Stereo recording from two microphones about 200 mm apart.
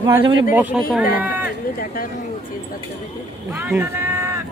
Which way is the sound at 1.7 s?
45° left (ahead or behind).